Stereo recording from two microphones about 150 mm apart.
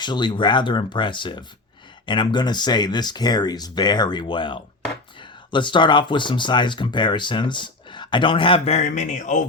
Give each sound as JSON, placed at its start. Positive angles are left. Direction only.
{"t": 0.0, "sound": "speech", "side_deg": 30}